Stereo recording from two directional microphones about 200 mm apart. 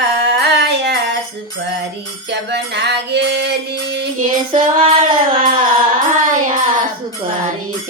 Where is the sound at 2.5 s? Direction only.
55° right (ahead or behind).